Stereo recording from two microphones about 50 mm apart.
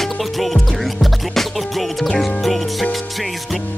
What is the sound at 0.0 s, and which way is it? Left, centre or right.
Music, centre.